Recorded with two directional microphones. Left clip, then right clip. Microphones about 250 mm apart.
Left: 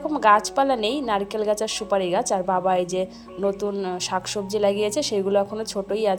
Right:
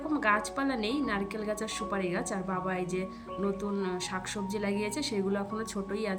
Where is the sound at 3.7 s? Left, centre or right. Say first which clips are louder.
Left 8 dB; centre.